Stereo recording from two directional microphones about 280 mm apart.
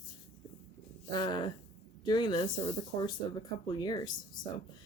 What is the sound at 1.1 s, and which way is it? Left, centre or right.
A woman's voice, centre.